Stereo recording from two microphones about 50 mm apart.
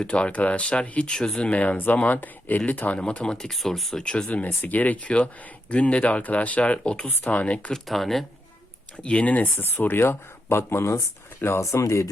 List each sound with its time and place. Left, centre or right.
0.0 s speech: centre
0.3 s speech: left
1.7 s speech: left
3.3 s speech: centre
4.4 s speech: left
7.1 s speech: left
7.9 s speech: centre
9.0 s speech: left
11.6 s speech: left